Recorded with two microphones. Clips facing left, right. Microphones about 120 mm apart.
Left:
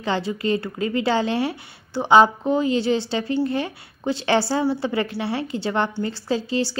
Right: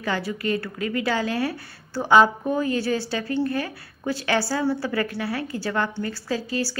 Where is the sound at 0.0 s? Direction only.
25° left (ahead or behind).